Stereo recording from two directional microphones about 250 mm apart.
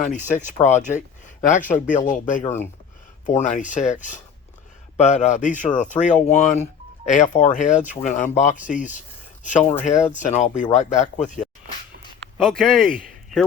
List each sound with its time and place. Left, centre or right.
0.0 s speech: left
12.4 s speech: centre